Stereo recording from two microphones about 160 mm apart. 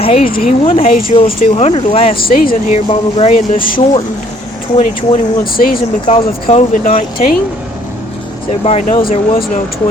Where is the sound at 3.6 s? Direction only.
60° left (ahead or behind).